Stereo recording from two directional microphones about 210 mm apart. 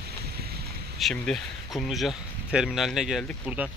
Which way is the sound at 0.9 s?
Centre (ahead or behind).